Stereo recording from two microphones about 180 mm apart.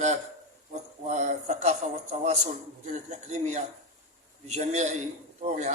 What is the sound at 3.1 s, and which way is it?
A man's voice, 40° right (ahead or behind).